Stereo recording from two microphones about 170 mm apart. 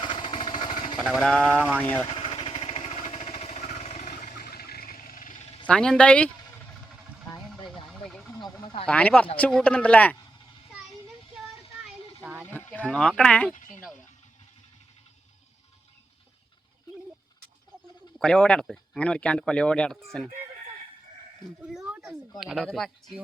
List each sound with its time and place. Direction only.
0.0 s a sound: 30° left (ahead or behind)
1.0 s speech: centre (ahead or behind)
2.0 s vehicle: 30° left (ahead or behind); by 5.4 s 55° left (ahead or behind)
5.6 s speech: 5° left (ahead or behind)
8.0 s a sound: centre (ahead or behind)
8.6 s speech: 30° left (ahead or behind)
8.9 s speech: 5° left (ahead or behind)
11.9 s a sound: 10° right (ahead or behind)
12.5 s speech: 10° left (ahead or behind)
18.2 s speech: 5° left (ahead or behind)
21.6 s a child's voice: 5° right (ahead or behind)